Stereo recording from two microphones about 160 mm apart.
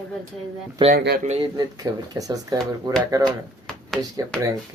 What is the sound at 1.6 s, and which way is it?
Speech, 20° right (ahead or behind).